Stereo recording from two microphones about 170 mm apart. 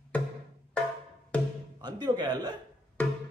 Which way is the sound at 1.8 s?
25° right (ahead or behind).